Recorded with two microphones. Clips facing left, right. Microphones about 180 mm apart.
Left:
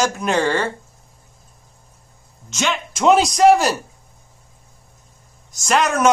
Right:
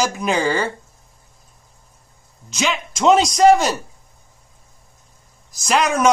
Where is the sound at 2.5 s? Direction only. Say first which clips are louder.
Even; centre (ahead or behind).